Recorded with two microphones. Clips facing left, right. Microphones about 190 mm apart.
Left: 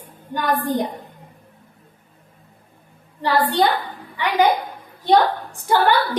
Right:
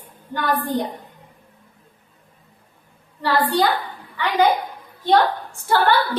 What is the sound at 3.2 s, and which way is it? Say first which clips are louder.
Speech: left 1 dB; 25° left (ahead or behind).